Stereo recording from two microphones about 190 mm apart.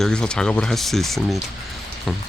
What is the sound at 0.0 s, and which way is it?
Speech, 5° left (ahead or behind).